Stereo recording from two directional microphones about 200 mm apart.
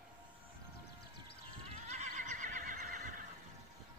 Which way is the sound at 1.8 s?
35° right (ahead or behind).